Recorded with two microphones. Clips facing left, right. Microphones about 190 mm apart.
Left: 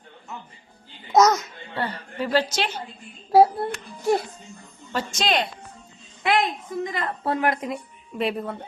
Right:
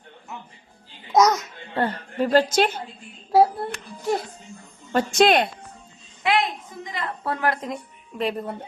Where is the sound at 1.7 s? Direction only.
50° right (ahead or behind).